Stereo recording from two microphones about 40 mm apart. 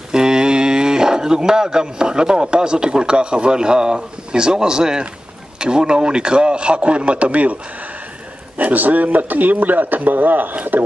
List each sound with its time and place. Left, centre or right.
0.1 s a man's voice: centre; by 7.5 s right
8.5 s speech: right